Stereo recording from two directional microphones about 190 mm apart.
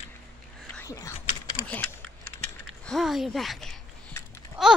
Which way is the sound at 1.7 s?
5° left (ahead or behind).